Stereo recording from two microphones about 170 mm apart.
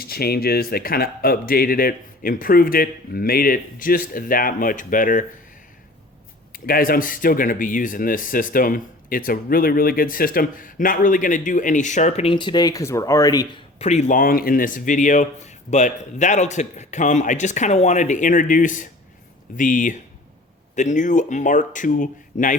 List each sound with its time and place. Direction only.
0.0 s a man's voice: 65° left (ahead or behind)
6.5 s speech: 55° left (ahead or behind); by 13.6 s 25° left (ahead or behind)
13.7 s speech: 40° left (ahead or behind)